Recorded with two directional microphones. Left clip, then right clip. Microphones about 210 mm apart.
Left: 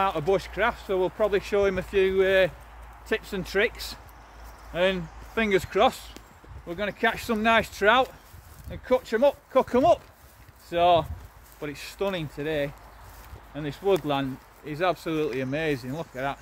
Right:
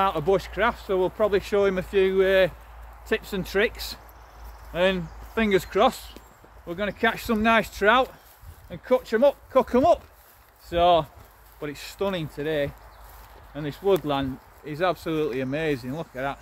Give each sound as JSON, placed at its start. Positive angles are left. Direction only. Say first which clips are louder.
{"t": 0.0, "sound": "speech", "louder": "right 2 dB", "side_deg": -10}